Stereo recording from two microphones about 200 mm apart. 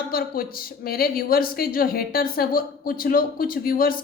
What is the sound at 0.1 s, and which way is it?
Speech, 45° left (ahead or behind).